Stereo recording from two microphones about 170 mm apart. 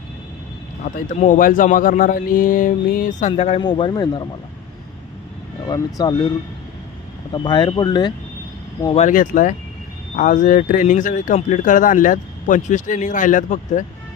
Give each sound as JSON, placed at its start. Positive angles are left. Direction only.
{"t": 0.9, "sound": "speech", "side_deg": 50}
{"t": 3.6, "sound": "speech", "side_deg": 30}
{"t": 5.6, "sound": "speech", "side_deg": 25}
{"t": 7.3, "sound": "speech", "side_deg": 25}
{"t": 9.0, "sound": "speech", "side_deg": 50}